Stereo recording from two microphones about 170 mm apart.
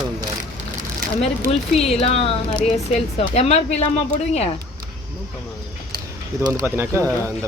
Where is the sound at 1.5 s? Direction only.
35° left (ahead or behind).